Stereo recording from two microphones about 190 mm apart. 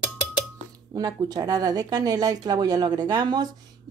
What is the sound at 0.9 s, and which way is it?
Speech, 20° right (ahead or behind).